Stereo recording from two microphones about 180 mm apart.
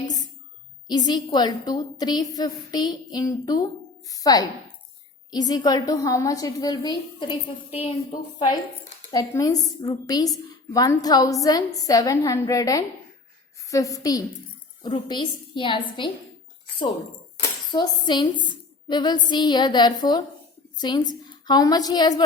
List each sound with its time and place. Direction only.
0.9 s a woman's voice: 25° left (ahead or behind)
9.1 s a woman's voice: 20° left (ahead or behind)
17.7 s a woman's voice: 25° left (ahead or behind)